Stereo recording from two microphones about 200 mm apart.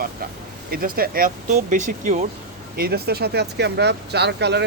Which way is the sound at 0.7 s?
45° right (ahead or behind).